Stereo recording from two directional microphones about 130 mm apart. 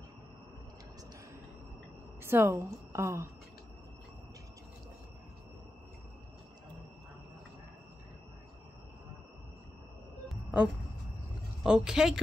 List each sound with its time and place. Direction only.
2.2 s a woman's voice: 20° right (ahead or behind)
10.2 s a sound: 10° right (ahead or behind)
11.6 s a woman's voice: 5° right (ahead or behind)